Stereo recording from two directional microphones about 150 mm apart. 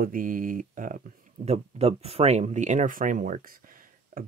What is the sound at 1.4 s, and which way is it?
Speech, 45° right (ahead or behind).